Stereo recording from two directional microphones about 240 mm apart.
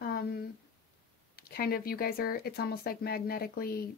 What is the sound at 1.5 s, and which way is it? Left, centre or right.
Speech, left.